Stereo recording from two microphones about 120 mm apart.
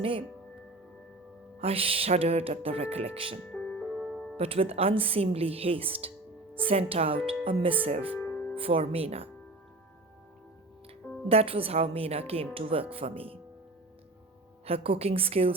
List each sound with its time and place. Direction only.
0.0 s speech: 50° right (ahead or behind)
1.5 s music: 55° right (ahead or behind)
3.5 s music: 5° left (ahead or behind)
4.4 s speech: 55° right (ahead or behind)
8.2 s music: 10° left (ahead or behind)
8.5 s music: 50° right (ahead or behind)
11.3 s music: 55° right (ahead or behind)
12.3 s speech: 50° right (ahead or behind)
14.6 s music: 55° right (ahead or behind)